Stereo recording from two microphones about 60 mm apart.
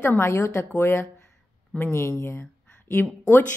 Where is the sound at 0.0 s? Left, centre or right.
Left.